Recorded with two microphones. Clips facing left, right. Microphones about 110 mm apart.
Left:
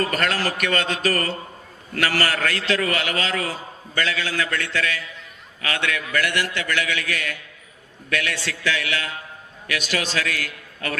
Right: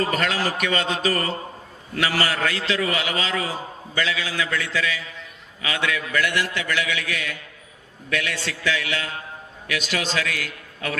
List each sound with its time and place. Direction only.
0.0 s a man's voice: 50° left (ahead or behind)